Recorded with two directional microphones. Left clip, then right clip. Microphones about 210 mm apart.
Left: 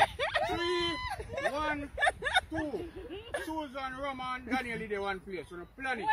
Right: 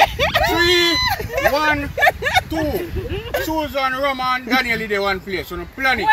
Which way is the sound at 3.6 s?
30° right (ahead or behind).